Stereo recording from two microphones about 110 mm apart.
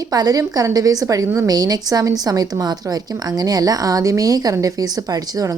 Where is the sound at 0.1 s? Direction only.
35° right (ahead or behind).